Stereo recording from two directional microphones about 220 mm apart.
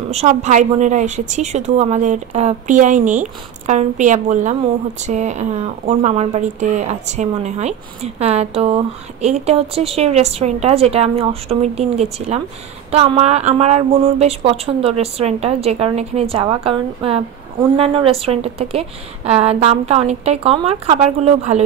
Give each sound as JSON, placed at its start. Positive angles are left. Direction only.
{"t": 0.1, "sound": "a woman's voice", "side_deg": -30}